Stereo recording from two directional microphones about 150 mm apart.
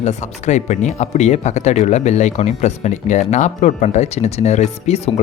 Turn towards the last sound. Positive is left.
turn(degrees=45)  # may be behind; listen again after turning